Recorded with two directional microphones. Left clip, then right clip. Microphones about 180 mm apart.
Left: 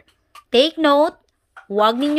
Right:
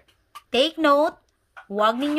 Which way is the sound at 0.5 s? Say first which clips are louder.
Left 4 dB; 20° left (ahead or behind).